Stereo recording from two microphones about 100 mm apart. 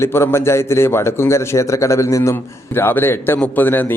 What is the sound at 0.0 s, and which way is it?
Speech, 25° left (ahead or behind).